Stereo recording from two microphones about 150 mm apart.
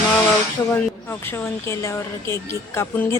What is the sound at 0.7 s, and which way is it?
Speech, 15° left (ahead or behind).